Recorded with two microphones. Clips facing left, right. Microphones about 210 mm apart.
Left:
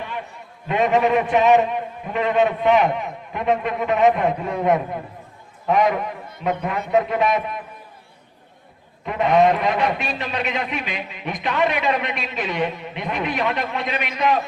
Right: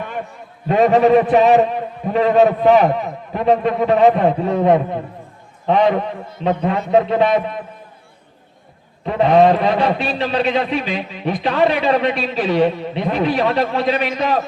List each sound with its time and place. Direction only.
0.0 s a sound: 45° right (ahead or behind)
0.7 s a man's voice: 35° right (ahead or behind)
9.0 s a man's voice: 30° right (ahead or behind)